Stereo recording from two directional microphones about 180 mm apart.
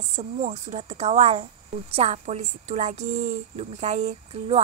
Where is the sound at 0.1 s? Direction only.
35° right (ahead or behind).